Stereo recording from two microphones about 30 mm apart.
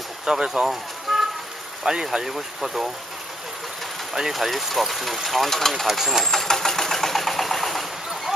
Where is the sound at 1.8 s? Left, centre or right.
Centre.